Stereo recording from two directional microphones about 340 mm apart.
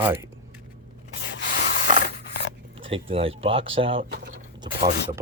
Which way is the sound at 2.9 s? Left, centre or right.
Centre.